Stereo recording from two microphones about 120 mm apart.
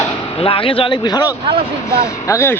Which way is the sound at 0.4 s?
50° left (ahead or behind).